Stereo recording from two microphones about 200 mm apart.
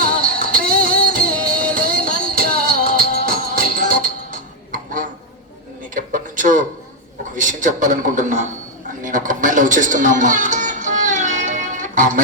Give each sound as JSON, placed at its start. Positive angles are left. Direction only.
{"t": 0.0, "sound": "music", "side_deg": -45}
{"t": 5.9, "sound": "a sound", "side_deg": -40}
{"t": 9.0, "sound": "music", "side_deg": -40}